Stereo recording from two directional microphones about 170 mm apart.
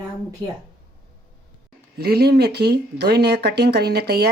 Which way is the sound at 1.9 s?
65° right (ahead or behind).